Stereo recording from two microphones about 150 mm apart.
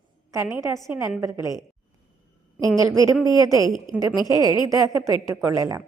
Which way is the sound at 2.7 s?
20° right (ahead or behind).